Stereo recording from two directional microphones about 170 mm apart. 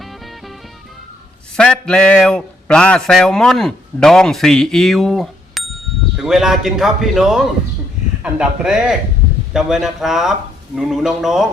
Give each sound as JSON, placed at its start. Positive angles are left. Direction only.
{"t": 0.0, "sound": "music", "side_deg": 0}
{"t": 1.5, "sound": "speech", "side_deg": 5}